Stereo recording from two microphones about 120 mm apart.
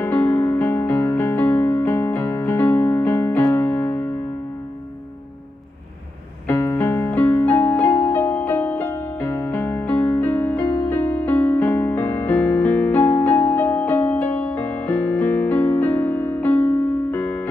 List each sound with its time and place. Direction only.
0.0 s music: 15° left (ahead or behind)
6.4 s keyboard: 20° left (ahead or behind)
13.2 s music: 15° left (ahead or behind)